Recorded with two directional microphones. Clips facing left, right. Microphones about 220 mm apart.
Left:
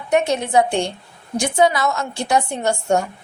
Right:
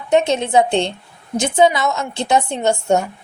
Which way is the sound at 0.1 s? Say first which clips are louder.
Right 2 dB; 25° right (ahead or behind).